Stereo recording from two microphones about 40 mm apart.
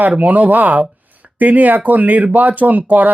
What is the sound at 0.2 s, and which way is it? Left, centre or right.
Speech, right.